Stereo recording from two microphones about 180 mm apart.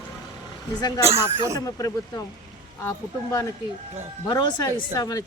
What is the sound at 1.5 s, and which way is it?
Speech, 20° left (ahead or behind).